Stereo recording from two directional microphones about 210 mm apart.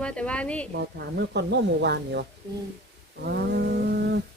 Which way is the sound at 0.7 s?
50° right (ahead or behind).